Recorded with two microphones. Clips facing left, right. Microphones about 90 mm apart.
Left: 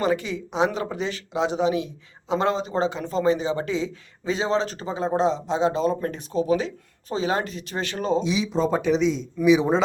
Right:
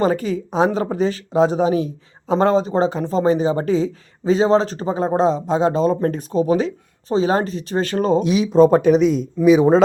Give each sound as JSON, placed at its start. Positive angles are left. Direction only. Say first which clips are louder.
{"t": 0.0, "sound": "speech", "louder": "right 5 dB", "side_deg": -40}
{"t": 8.2, "sound": "speech", "louder": "right 10 dB", "side_deg": -55}